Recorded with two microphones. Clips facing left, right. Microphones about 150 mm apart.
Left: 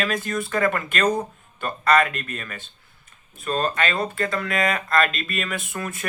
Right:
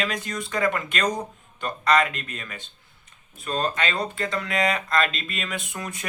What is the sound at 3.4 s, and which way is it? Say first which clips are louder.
Speech: left 2 dB; 20° right (ahead or behind).